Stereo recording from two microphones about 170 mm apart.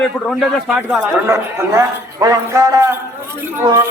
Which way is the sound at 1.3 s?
15° right (ahead or behind).